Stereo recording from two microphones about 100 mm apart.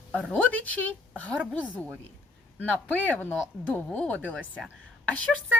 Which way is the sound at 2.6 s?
15° left (ahead or behind).